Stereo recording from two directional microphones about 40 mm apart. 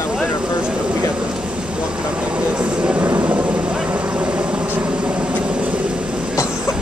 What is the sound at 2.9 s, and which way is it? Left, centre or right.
Vehicle, right.